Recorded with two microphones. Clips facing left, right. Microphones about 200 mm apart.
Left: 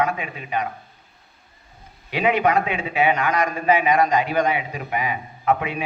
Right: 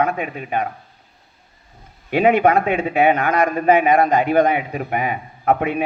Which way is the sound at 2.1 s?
50° right (ahead or behind).